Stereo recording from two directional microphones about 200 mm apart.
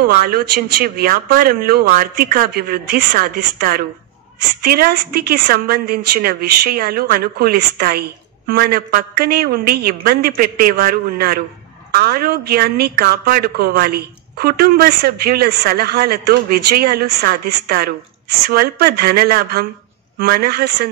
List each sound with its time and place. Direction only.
0.0 s a woman's voice: 50° right (ahead or behind)